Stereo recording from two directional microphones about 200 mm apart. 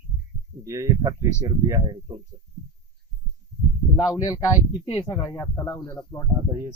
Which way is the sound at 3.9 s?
20° left (ahead or behind).